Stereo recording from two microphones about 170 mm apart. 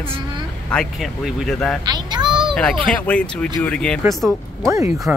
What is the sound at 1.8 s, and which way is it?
Child singing, 25° right (ahead or behind).